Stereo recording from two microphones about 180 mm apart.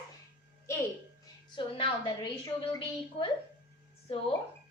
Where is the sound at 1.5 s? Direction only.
25° left (ahead or behind).